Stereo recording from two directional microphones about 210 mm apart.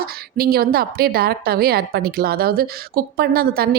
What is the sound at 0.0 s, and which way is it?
A woman's voice, 45° right (ahead or behind).